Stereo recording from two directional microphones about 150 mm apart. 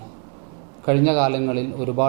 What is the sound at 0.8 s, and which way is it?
A man's voice, 10° right (ahead or behind).